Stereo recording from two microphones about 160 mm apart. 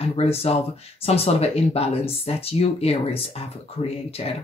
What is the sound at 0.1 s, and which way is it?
Speech, 40° left (ahead or behind).